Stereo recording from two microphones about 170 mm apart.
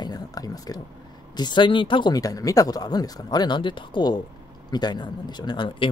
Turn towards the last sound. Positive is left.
turn(degrees=25)  # may be behind; listen again after turning